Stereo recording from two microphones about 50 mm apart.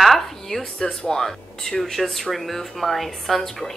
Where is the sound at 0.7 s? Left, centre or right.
Centre.